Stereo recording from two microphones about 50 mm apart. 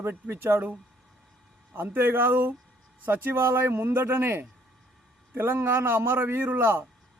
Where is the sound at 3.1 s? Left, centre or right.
Right.